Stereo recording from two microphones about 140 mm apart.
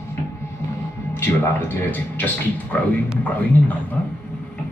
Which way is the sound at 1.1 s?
15° left (ahead or behind).